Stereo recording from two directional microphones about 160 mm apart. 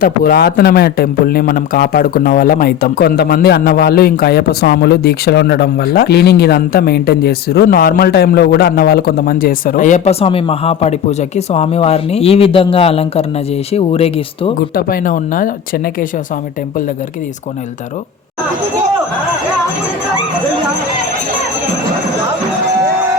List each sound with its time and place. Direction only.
0.0 s a man's voice: 70° left (ahead or behind); by 14.5 s 40° left (ahead or behind)
14.8 s speech: 65° left (ahead or behind)